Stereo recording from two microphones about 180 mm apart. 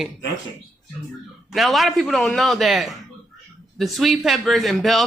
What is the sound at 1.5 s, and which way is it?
Speech, centre (ahead or behind).